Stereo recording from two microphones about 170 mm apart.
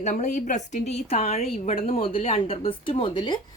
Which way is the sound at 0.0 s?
45° left (ahead or behind).